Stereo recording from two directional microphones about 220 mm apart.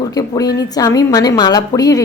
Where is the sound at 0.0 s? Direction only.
15° left (ahead or behind).